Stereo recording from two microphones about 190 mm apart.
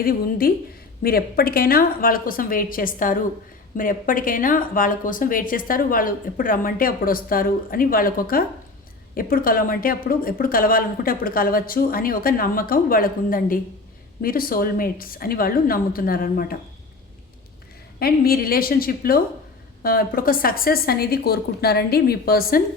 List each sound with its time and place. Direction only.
0.0 s a woman's voice: 50° left (ahead or behind)
18.0 s a woman's voice: 55° left (ahead or behind)